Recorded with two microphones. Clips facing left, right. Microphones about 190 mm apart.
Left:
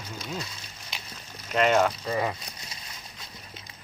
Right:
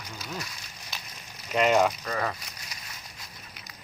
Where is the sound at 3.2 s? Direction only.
25° left (ahead or behind).